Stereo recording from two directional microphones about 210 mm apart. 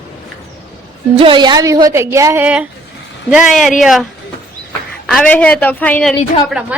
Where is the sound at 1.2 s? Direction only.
20° right (ahead or behind).